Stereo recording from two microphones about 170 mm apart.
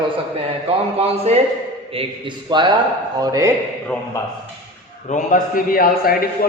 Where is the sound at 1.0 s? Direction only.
35° right (ahead or behind); by 3.5 s 20° right (ahead or behind).